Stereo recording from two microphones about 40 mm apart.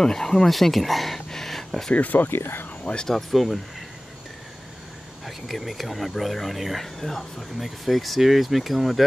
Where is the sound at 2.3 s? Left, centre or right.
Left.